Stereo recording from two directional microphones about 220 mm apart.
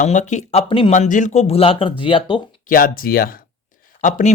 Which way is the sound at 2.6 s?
40° left (ahead or behind).